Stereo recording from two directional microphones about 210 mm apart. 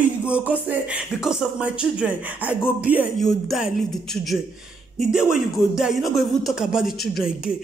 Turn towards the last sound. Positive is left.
turn(degrees=0)  # may be behind; listen again after turning